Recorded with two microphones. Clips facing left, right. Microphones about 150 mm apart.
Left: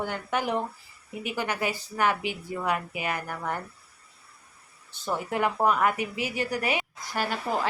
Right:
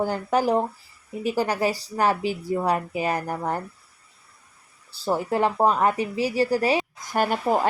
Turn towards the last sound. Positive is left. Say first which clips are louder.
# right 7 dB
turn(degrees=-50)  # may be behind; listen again after turning